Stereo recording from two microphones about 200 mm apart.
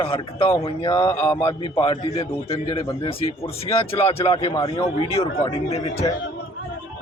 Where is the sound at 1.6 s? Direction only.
25° left (ahead or behind).